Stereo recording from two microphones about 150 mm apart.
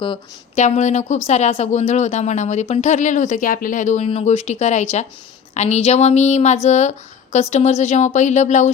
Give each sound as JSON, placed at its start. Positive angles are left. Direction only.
{"t": 0.0, "sound": "speech", "side_deg": 35}
{"t": 0.6, "sound": "speech", "side_deg": 50}